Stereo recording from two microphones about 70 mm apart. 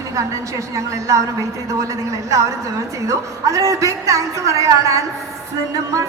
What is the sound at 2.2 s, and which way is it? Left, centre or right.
Speech, right.